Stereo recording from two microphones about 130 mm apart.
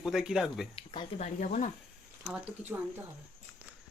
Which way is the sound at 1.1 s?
65° left (ahead or behind).